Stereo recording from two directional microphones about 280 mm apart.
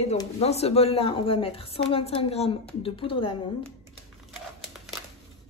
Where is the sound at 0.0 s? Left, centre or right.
Left.